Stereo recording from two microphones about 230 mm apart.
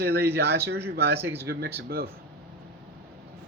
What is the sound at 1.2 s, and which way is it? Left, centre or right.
Speech, centre.